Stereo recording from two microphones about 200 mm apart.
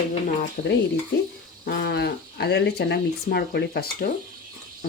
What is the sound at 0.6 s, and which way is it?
Stir, 50° left (ahead or behind).